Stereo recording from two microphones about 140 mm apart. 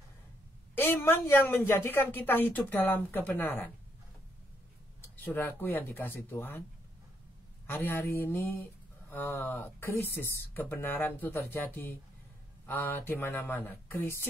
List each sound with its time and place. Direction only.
0.7 s a sound: 15° left (ahead or behind)
1.7 s speech: 15° left (ahead or behind)
5.0 s speech: 15° left (ahead or behind)
7.6 s speech: 15° left (ahead or behind)